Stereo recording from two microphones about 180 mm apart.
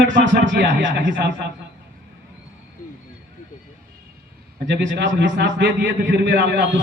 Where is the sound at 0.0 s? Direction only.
85° right.